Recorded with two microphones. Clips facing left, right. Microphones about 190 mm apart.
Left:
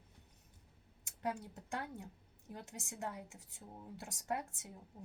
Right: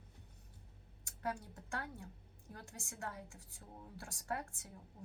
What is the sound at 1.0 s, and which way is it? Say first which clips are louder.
A woman's voice: left 2 dB; 20° left (ahead or behind).